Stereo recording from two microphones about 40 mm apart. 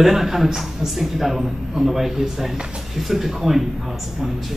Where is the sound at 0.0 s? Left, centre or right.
Centre.